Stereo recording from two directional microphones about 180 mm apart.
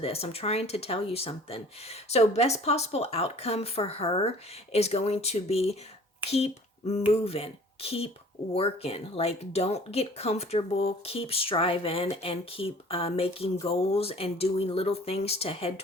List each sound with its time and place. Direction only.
0.0 s speech: 35° left (ahead or behind)
6.2 s a sound: 35° left (ahead or behind)
7.1 s speech: 35° left (ahead or behind)